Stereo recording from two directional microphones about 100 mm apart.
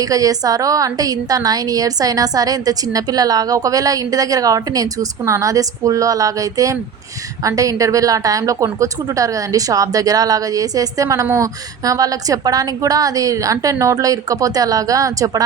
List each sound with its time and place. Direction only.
0.0 s a woman's voice: 35° right (ahead or behind)